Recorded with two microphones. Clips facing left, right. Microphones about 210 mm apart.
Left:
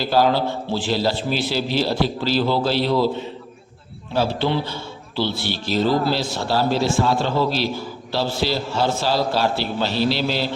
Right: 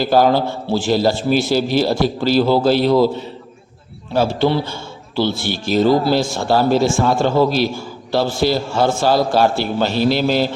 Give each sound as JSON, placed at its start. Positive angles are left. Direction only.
{"t": 0.0, "sound": "a man's voice", "side_deg": -50}